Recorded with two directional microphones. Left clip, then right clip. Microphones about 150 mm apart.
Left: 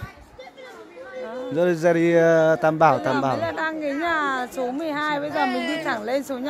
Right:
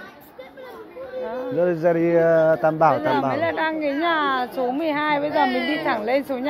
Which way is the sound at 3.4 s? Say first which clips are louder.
Right 3 dB; 15° left (ahead or behind).